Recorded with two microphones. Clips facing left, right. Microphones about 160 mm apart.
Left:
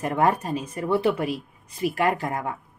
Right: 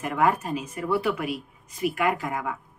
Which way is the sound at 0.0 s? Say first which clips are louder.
Left 1 dB; 30° left (ahead or behind).